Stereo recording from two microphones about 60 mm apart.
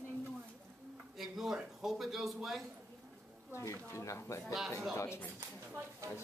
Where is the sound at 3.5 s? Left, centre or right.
Left.